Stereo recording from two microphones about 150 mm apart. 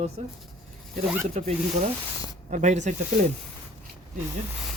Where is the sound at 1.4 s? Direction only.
50° right (ahead or behind).